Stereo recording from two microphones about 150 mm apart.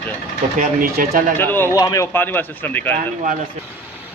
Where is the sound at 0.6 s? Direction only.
70° right (ahead or behind).